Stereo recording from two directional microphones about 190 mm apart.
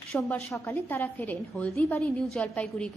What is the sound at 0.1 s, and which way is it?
A woman's voice, 10° left (ahead or behind).